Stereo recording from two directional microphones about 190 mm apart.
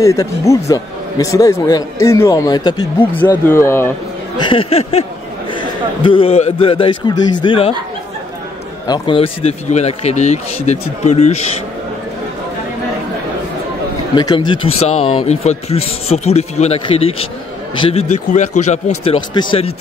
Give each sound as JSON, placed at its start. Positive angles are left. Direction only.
{"t": 0.0, "sound": "a man's voice", "side_deg": 15}
{"t": 4.4, "sound": "a man's voice", "side_deg": 25}
{"t": 8.8, "sound": "speech", "side_deg": 25}
{"t": 14.1, "sound": "speech", "side_deg": 25}